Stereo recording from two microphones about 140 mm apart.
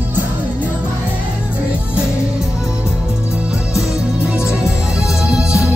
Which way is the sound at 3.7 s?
5° right (ahead or behind).